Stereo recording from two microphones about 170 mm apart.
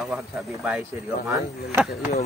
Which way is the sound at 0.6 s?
Centre (ahead or behind).